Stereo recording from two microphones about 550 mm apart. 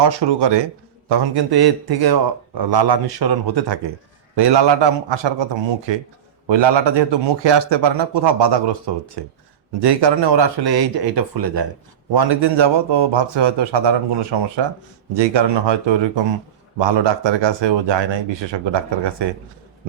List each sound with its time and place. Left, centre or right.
0.0 s a man's voice: right